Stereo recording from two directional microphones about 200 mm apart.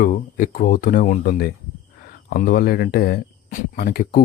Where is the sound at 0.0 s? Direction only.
45° left (ahead or behind).